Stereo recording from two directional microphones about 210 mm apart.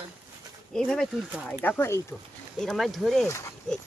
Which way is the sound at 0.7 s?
5° left (ahead or behind).